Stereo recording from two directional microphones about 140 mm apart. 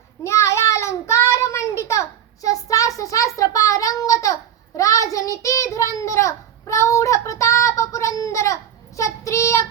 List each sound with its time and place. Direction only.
0.3 s child singing: 20° left (ahead or behind)